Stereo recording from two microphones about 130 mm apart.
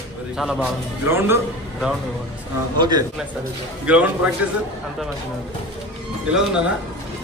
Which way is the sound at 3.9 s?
10° right (ahead or behind).